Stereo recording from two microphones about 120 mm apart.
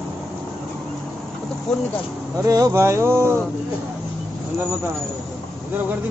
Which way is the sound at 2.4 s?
30° right (ahead or behind).